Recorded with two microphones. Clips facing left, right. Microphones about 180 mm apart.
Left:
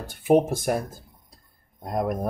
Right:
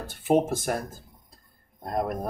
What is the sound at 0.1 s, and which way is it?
Speech, 15° left (ahead or behind).